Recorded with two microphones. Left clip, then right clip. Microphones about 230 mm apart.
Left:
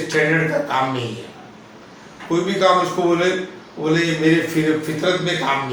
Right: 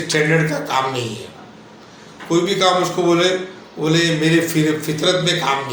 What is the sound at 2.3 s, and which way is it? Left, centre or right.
A man's voice, right.